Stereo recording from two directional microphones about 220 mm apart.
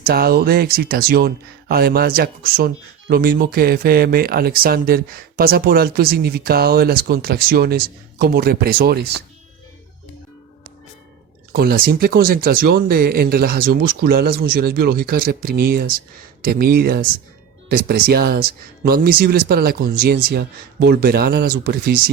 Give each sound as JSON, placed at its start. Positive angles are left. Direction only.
{"t": 0.0, "sound": "speech", "side_deg": -45}
{"t": 11.5, "sound": "speech", "side_deg": -45}